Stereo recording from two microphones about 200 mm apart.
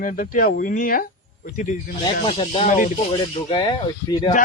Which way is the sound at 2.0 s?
25° left (ahead or behind).